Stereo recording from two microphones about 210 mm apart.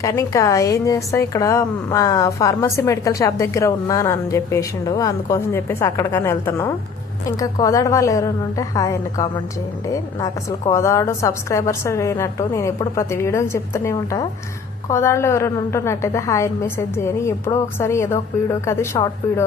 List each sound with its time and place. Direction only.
0.0 s a woman's voice: 15° left (ahead or behind)